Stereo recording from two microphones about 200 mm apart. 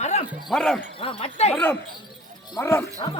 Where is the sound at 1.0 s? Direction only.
30° left (ahead or behind).